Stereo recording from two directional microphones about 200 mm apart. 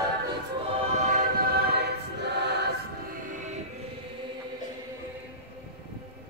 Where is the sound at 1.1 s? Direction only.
50° right (ahead or behind).